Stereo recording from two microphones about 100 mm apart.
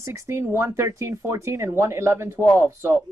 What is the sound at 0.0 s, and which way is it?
Speech, 30° right (ahead or behind).